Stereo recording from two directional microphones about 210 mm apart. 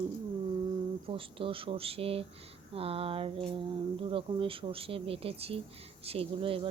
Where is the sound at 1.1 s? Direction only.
25° right (ahead or behind).